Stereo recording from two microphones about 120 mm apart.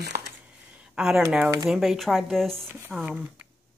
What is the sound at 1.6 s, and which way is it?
Speech, centre (ahead or behind).